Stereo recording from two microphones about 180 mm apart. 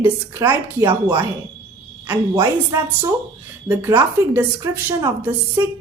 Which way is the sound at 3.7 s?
10° right (ahead or behind).